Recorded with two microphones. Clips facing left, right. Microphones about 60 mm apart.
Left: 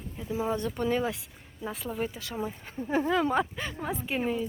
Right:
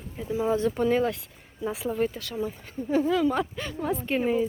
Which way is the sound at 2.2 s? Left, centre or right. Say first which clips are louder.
Right 3 dB; centre.